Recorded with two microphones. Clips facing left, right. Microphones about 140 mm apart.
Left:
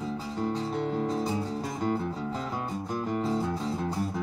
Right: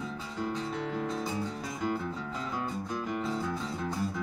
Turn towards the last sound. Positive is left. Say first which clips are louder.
# left 3 dB
turn(degrees=35)  # may be behind; listen again after turning